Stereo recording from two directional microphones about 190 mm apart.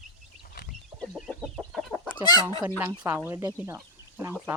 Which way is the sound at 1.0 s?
Centre (ahead or behind).